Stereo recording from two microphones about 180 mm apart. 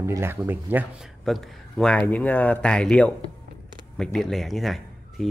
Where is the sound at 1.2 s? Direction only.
Centre (ahead or behind).